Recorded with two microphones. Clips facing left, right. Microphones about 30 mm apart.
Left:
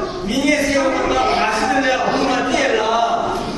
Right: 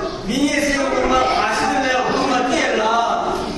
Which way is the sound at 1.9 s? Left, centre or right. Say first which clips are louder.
Even; centre.